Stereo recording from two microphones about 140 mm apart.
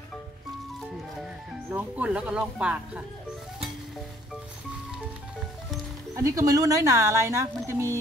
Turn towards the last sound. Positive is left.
turn(degrees=-20)  # may be behind; listen again after turning